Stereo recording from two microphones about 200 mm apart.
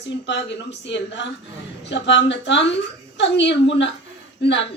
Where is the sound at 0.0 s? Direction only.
60° left (ahead or behind).